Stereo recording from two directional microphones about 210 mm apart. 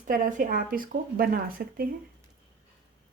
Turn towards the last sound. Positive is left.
turn(degrees=-45)  # may be behind; listen again after turning